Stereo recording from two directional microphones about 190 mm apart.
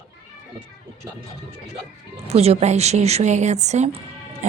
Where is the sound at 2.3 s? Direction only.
35° right (ahead or behind).